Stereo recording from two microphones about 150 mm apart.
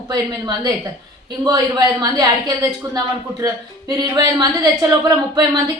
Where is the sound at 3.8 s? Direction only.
25° right (ahead or behind).